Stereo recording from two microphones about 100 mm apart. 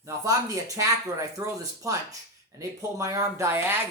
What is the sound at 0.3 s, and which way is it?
Speech, 35° right (ahead or behind).